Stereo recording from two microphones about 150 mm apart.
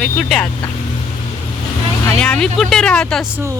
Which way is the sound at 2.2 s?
5° left (ahead or behind).